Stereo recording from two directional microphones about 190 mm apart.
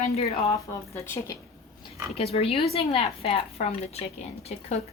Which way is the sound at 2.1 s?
30° left (ahead or behind).